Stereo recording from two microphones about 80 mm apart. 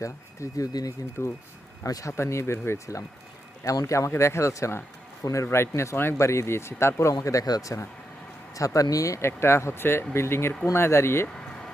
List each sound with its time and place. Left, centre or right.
0.0 s speech: left
1.2 s speech: left